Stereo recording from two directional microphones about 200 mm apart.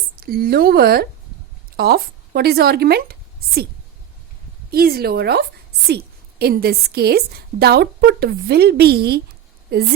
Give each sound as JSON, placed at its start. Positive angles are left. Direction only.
{"t": 0.2, "sound": "a woman's voice", "side_deg": -50}
{"t": 4.7, "sound": "a woman's voice", "side_deg": -50}